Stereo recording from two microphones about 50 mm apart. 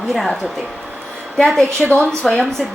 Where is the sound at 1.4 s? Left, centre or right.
Centre.